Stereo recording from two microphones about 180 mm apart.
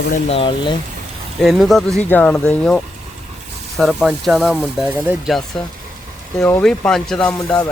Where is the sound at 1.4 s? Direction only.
Centre (ahead or behind).